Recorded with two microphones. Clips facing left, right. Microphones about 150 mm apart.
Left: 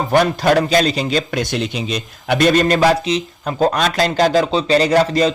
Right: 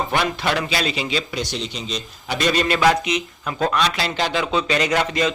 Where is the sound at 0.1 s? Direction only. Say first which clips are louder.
Left 8 dB; 45° left (ahead or behind).